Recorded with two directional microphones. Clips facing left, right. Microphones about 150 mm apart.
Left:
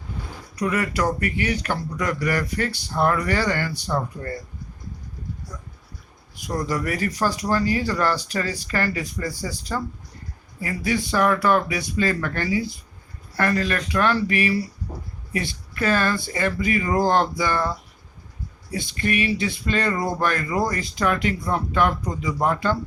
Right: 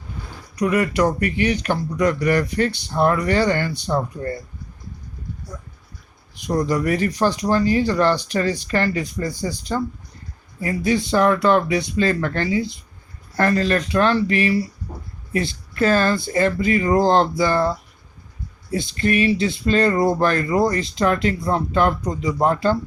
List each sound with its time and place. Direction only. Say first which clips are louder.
0.6 s speech: right 5 dB; 20° right (ahead or behind)
6.3 s speech: right 5 dB; 20° right (ahead or behind)
18.9 s speech: right 5 dB; 30° right (ahead or behind)